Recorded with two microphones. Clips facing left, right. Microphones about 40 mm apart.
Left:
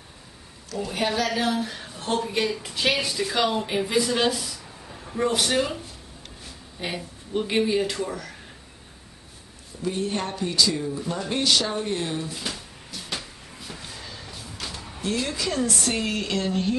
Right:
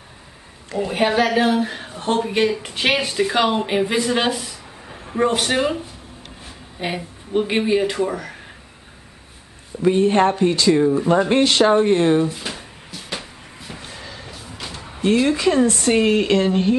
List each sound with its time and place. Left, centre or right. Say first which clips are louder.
0.7 s speech: right 7 dB; right
9.8 s speech: right 12 dB; right
12.3 s speech: right 4 dB; centre
12.9 s vehicle: right 3 dB; centre
14.4 s music: right 1 dB; centre
15.0 s speech: right 10 dB; right